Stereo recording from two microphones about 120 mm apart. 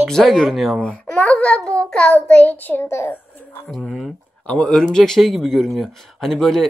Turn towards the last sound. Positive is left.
turn(degrees=5)  # may be behind; listen again after turning